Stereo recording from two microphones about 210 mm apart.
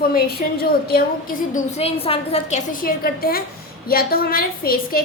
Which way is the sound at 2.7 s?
40° left (ahead or behind).